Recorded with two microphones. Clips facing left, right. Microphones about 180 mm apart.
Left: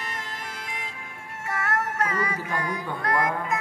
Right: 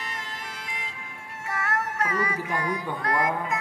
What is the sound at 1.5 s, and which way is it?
Speech, 50° left (ahead or behind).